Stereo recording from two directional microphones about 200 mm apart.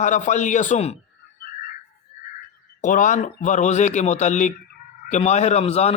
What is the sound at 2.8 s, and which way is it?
A man's voice, 40° left (ahead or behind).